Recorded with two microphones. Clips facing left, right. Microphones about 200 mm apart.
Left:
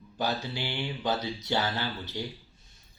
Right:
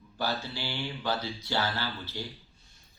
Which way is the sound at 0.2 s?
15° left (ahead or behind).